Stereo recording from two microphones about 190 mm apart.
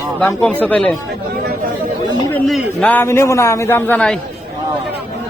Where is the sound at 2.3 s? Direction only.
10° left (ahead or behind).